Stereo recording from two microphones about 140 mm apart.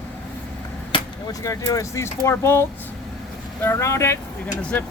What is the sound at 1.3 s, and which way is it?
Speech, 25° left (ahead or behind).